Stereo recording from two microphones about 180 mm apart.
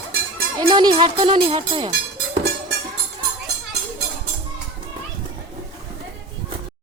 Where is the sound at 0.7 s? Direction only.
25° right (ahead or behind).